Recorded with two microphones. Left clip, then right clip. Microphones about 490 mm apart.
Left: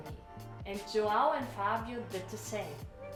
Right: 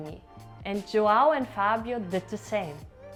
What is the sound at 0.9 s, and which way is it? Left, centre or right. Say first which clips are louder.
Speech: right 8 dB; right.